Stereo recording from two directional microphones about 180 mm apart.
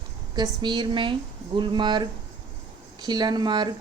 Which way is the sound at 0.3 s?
25° right (ahead or behind).